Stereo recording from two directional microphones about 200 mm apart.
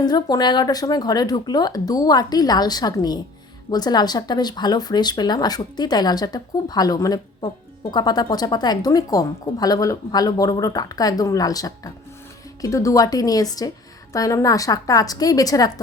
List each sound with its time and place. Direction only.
0.0 s a woman's voice: 20° left (ahead or behind)